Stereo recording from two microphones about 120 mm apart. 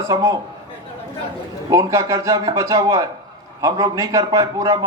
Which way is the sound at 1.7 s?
25° right (ahead or behind).